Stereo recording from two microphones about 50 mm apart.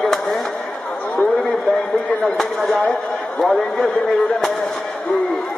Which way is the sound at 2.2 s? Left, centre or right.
Centre.